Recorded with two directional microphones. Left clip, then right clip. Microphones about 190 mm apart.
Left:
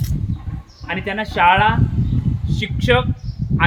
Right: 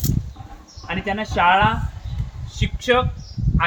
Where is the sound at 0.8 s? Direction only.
25° left (ahead or behind).